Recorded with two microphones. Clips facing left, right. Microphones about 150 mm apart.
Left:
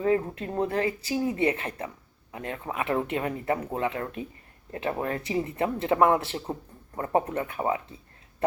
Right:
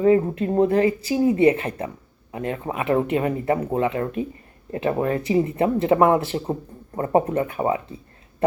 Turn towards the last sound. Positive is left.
turn(degrees=-25)  # may be behind; listen again after turning